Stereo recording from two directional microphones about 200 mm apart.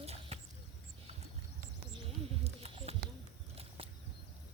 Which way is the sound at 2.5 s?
30° right (ahead or behind).